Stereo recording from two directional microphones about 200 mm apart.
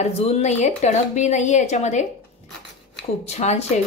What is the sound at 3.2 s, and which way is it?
Speech, 35° left (ahead or behind).